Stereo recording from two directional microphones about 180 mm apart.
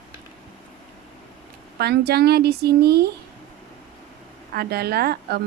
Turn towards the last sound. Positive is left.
turn(degrees=-60)  # may be behind; listen again after turning